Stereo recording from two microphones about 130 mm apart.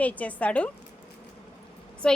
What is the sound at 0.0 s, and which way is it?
Speech, 10° left (ahead or behind).